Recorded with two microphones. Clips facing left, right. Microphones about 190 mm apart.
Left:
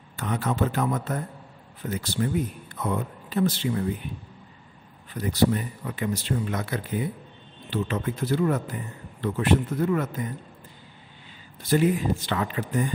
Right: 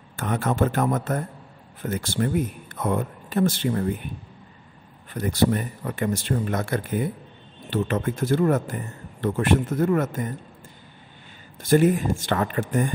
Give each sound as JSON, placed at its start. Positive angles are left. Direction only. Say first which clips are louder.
{"t": 0.1, "sound": "speech", "louder": "right 3 dB", "side_deg": -50}
{"t": 5.1, "sound": "speech", "louder": "right 1 dB", "side_deg": -50}
{"t": 11.6, "sound": "speech", "louder": "right 4 dB", "side_deg": -45}